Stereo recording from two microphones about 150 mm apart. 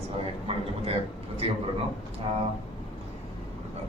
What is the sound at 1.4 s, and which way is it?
Speech, 40° right (ahead or behind).